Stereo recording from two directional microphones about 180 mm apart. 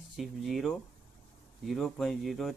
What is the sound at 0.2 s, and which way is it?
Speech, centre (ahead or behind).